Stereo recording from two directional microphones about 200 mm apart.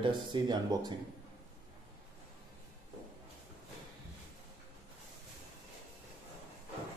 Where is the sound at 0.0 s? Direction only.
20° right (ahead or behind).